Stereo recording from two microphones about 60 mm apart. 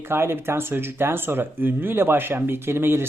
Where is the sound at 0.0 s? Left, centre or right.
Right.